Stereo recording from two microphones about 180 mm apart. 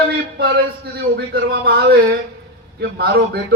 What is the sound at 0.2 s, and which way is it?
A man's voice, 60° right (ahead or behind).